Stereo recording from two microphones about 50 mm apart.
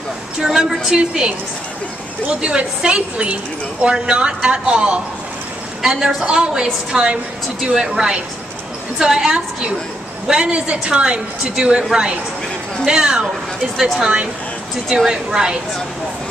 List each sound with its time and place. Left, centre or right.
0.4 s a woman's voice: centre